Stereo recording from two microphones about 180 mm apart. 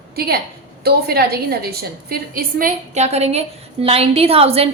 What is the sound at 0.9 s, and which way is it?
A woman's voice, 60° right (ahead or behind).